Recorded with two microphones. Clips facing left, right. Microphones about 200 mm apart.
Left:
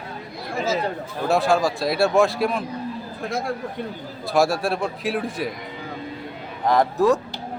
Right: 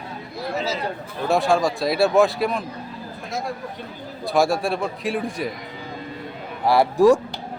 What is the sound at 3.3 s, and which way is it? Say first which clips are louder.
Speech: left 2 dB; 55° left (ahead or behind).